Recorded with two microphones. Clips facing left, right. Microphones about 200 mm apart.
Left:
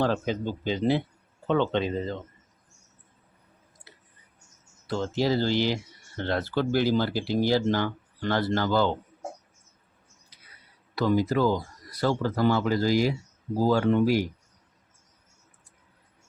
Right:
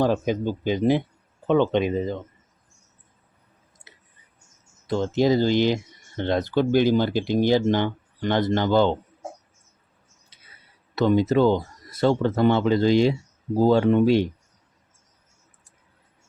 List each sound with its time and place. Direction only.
0.0 s speech: 15° right (ahead or behind)
3.9 s a sound: 20° right (ahead or behind)
4.9 s speech: 20° right (ahead or behind)
10.9 s speech: 25° right (ahead or behind)